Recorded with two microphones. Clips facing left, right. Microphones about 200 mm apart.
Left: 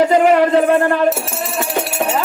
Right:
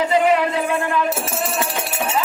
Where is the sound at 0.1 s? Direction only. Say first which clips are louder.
Left 5 dB; 40° left (ahead or behind).